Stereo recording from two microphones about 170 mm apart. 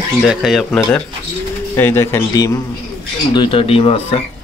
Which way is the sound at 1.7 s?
15° left (ahead or behind).